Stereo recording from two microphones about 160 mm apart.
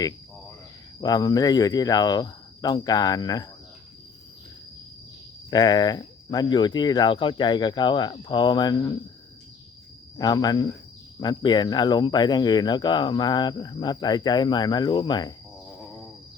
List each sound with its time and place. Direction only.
1.0 s speech: 25° left (ahead or behind)
5.5 s speech: 25° left (ahead or behind)
10.2 s speech: 25° left (ahead or behind)